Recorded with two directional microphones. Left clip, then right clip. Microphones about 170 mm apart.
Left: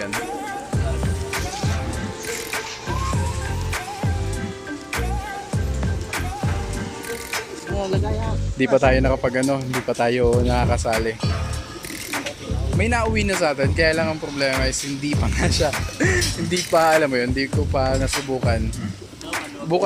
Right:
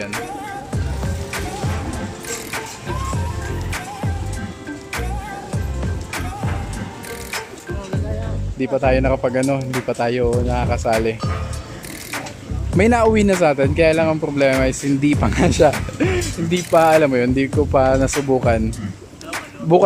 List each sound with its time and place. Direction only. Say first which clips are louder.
0.0 s music: even; centre (ahead or behind)
3.7 s music: left 1 dB; centre (ahead or behind)
5.8 s music: even; centre (ahead or behind)
8.5 s speech: left 1 dB; centre (ahead or behind)
12.7 s speech: right 7 dB; 25° right (ahead or behind)
15.7 s speech: right 1 dB; 5° right (ahead or behind)